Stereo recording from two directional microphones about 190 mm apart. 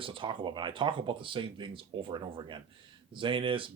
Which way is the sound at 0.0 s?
25° right (ahead or behind).